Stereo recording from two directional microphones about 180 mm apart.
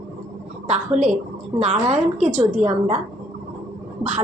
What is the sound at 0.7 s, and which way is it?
A woman's voice, 40° right (ahead or behind).